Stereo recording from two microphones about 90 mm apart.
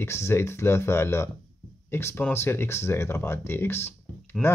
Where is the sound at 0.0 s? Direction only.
30° left (ahead or behind).